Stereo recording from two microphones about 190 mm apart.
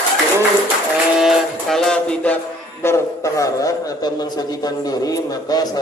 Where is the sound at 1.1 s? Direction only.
Centre (ahead or behind).